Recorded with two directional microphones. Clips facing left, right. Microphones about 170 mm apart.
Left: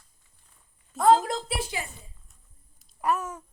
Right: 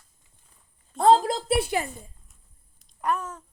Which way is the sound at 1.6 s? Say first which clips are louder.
Right 7 dB; 60° right (ahead or behind).